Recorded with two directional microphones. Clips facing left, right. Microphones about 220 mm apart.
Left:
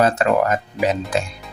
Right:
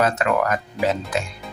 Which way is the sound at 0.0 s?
30° left (ahead or behind).